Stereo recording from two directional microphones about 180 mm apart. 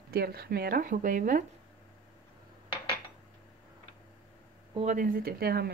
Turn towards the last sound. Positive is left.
turn(degrees=-60)  # may be behind; listen again after turning